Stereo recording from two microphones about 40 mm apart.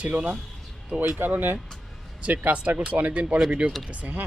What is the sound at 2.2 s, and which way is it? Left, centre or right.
Speech, right.